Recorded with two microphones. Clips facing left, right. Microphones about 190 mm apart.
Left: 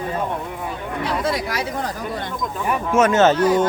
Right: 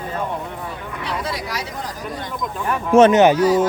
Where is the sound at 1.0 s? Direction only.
50° left (ahead or behind).